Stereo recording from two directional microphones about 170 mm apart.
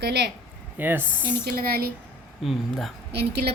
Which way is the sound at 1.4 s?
65° right (ahead or behind).